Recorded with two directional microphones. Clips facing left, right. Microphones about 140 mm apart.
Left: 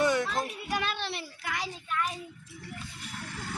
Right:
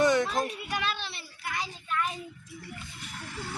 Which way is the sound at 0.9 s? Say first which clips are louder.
Left 5 dB; 80° left.